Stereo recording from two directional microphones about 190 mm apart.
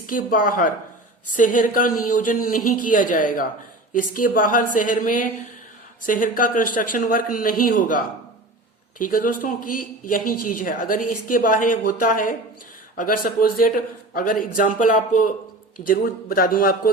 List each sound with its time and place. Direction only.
0.1 s speech: 45° left (ahead or behind)
9.0 s speech: 45° left (ahead or behind)